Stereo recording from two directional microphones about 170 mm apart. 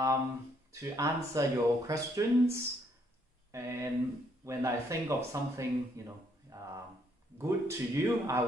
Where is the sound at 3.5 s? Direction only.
15° right (ahead or behind).